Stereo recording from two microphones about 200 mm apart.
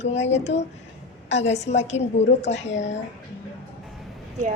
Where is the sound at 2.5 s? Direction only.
65° left (ahead or behind).